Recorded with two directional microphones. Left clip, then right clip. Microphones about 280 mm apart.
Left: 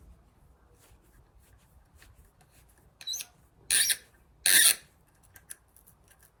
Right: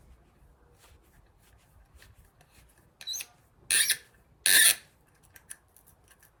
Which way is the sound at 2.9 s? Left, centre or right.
Centre.